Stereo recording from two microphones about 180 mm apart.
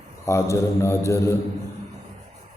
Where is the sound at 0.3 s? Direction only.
15° left (ahead or behind).